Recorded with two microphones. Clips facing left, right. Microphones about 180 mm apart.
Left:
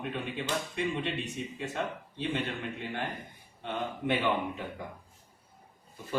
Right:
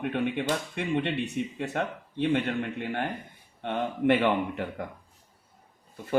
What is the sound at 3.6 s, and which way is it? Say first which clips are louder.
Speech: right 7 dB; 65° right (ahead or behind).